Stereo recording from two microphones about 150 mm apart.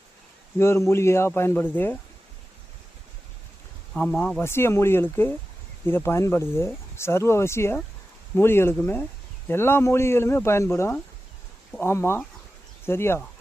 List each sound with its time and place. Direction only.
0.6 s speech: 15° left (ahead or behind)
3.9 s speech: 10° left (ahead or behind)
4.4 s speech: 15° left (ahead or behind)